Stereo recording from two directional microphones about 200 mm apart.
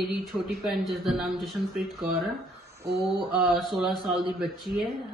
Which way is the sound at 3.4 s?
Centre (ahead or behind).